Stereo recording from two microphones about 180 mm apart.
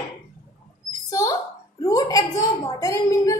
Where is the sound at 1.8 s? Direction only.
20° left (ahead or behind).